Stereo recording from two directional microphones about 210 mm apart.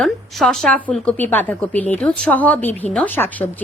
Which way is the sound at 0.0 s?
Centre (ahead or behind).